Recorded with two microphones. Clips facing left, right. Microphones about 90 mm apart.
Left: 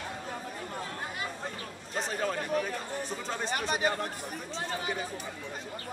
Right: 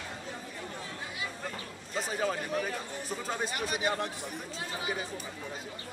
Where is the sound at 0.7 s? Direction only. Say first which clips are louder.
Left 4 dB; 50° left (ahead or behind).